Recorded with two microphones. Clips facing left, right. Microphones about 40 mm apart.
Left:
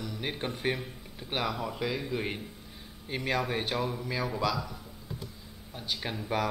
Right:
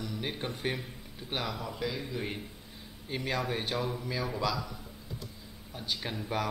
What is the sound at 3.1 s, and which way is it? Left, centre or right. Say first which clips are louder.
Speech: left 2 dB; centre.